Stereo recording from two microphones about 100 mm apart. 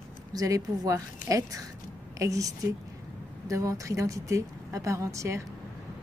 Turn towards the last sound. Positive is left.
turn(degrees=-30)  # may be behind; listen again after turning